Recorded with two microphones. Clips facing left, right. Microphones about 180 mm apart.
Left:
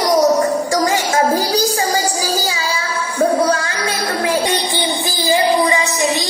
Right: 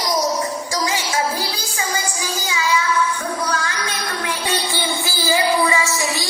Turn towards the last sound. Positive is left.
turn(degrees=20)  # may be behind; listen again after turning